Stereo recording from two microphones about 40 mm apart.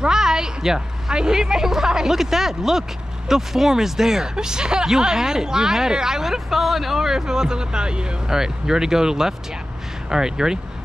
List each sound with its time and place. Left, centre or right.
0.0 s speech: centre